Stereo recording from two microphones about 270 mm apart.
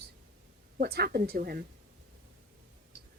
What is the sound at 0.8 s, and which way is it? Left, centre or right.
Speech, right.